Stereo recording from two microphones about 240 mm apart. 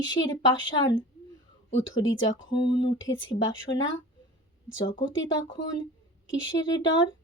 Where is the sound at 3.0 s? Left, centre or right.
Left.